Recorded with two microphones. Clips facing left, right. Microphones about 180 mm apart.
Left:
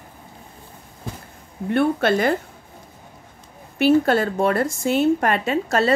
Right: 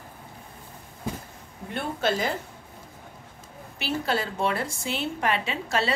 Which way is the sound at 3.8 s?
50° left (ahead or behind).